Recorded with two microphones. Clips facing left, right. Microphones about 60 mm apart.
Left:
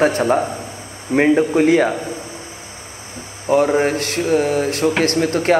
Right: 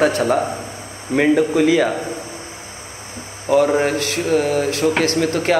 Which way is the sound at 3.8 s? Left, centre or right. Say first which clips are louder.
Left 1 dB; left.